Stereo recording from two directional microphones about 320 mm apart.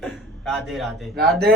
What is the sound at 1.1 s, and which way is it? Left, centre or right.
Speech, right.